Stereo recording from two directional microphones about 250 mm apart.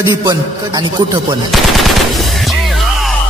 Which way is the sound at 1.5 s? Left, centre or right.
Centre.